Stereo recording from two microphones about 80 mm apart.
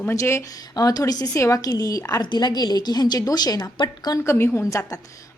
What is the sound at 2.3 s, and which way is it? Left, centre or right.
A woman's voice, left.